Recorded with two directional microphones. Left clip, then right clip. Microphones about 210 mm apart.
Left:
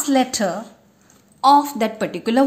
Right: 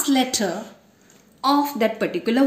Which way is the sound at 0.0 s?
40° left (ahead or behind).